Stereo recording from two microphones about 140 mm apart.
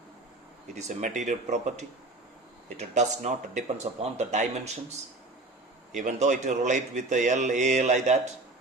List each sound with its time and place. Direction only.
0.8 s speech: 60° right (ahead or behind)